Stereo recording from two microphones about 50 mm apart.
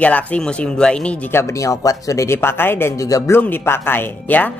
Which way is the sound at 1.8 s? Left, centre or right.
Left.